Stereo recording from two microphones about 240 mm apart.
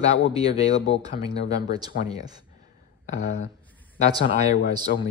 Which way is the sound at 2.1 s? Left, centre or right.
Centre.